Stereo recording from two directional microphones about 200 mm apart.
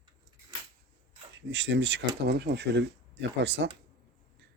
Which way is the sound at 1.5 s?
65° right (ahead or behind).